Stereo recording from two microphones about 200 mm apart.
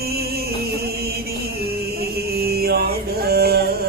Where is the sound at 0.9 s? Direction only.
50° right (ahead or behind).